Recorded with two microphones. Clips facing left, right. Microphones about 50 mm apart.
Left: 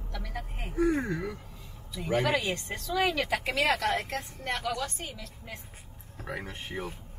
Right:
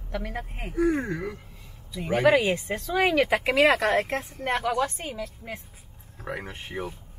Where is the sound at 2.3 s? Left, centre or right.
Right.